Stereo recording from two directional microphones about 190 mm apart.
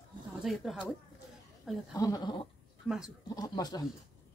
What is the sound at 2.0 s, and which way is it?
Speech, 20° left (ahead or behind).